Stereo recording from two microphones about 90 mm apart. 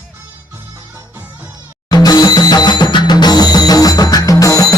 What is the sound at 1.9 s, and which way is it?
Music, 45° left (ahead or behind).